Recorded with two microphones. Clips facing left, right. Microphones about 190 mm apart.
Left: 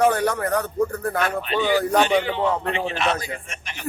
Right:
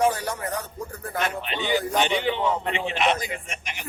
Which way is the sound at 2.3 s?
20° right (ahead or behind).